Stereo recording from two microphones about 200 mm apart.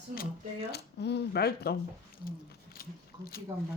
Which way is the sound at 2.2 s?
50° left (ahead or behind).